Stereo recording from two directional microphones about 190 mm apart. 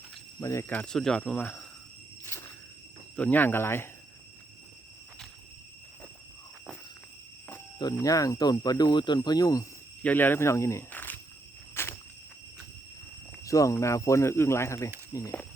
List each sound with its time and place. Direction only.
0.3 s speech: 15° left (ahead or behind)
3.2 s speech: 10° left (ahead or behind)
8.0 s speech: 15° left (ahead or behind)
11.7 s walk: 15° left (ahead or behind)
13.4 s speech: 15° left (ahead or behind)